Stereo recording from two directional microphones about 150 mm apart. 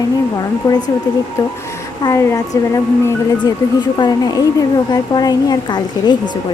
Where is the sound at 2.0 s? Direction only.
20° left (ahead or behind).